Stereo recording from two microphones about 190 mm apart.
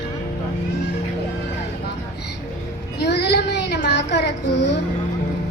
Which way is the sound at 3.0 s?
60° left (ahead or behind).